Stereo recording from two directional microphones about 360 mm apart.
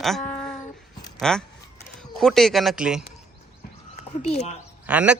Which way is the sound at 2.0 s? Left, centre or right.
Centre.